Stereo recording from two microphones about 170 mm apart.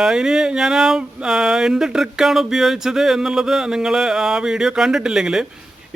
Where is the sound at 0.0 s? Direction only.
5° right (ahead or behind).